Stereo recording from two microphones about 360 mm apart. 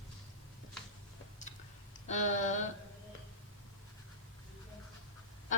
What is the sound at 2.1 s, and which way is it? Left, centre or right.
Speech, centre.